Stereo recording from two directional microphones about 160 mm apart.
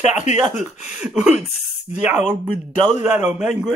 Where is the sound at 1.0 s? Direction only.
5° right (ahead or behind).